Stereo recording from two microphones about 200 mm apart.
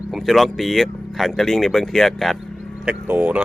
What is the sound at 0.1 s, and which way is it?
Speech, centre (ahead or behind).